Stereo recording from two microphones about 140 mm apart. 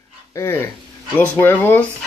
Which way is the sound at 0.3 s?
20° left (ahead or behind).